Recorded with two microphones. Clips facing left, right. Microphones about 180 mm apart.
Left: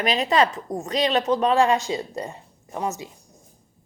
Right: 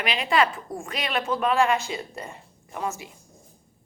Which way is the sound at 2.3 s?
20° left (ahead or behind).